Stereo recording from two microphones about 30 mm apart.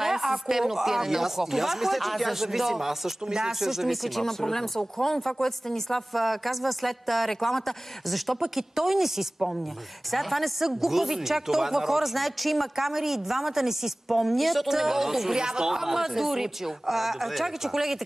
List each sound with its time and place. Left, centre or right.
0.0 s speech: centre
3.9 s speech: centre
4.2 s speech: centre
6.1 s speech: centre
8.4 s speech: centre
10.1 s speech: centre
10.6 s speech: centre
14.8 s speech: centre
15.3 s speech: right
15.7 s speech: centre